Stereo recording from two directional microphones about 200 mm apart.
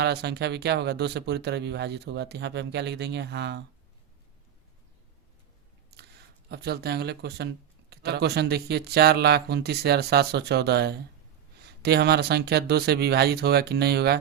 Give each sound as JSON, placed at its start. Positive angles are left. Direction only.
{"t": 0.0, "sound": "speech", "side_deg": -55}
{"t": 5.9, "sound": "a sound", "side_deg": -55}
{"t": 6.5, "sound": "speech", "side_deg": -55}